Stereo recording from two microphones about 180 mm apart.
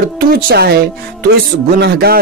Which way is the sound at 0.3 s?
60° right (ahead or behind).